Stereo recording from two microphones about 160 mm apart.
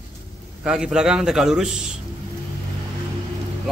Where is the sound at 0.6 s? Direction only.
5° right (ahead or behind).